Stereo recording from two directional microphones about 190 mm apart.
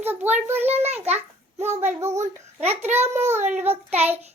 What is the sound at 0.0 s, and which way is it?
Child singing, 10° right (ahead or behind).